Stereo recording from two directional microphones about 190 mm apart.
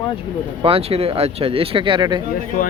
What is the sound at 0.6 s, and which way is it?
Speech, 30° right (ahead or behind).